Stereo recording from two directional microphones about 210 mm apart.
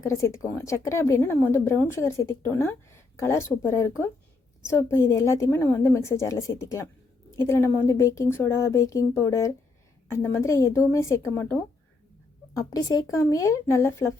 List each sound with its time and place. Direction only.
0.0 s a woman's voice: 15° left (ahead or behind)
12.5 s a woman's voice: 15° left (ahead or behind)